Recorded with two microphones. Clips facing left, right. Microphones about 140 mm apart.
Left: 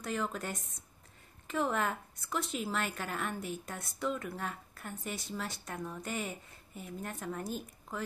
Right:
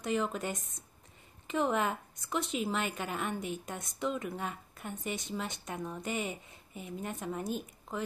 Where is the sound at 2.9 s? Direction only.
10° right (ahead or behind).